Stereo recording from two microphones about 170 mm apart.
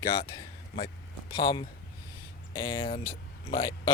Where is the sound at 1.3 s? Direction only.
30° left (ahead or behind).